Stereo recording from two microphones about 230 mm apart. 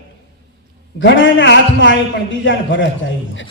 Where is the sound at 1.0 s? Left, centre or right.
Left.